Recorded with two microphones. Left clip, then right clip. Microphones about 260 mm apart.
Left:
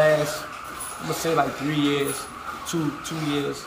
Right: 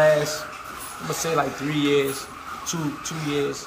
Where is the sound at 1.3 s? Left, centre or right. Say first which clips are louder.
Left 1 dB; centre.